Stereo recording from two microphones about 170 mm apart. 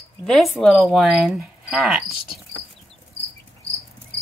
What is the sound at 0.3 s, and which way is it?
Speech, centre (ahead or behind).